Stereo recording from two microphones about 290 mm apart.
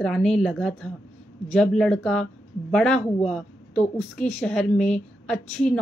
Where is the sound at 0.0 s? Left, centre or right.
Centre.